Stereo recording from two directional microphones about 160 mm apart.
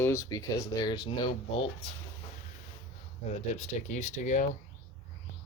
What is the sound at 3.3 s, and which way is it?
Speech, 45° left (ahead or behind).